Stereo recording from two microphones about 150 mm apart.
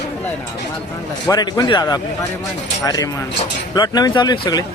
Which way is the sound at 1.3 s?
25° left (ahead or behind).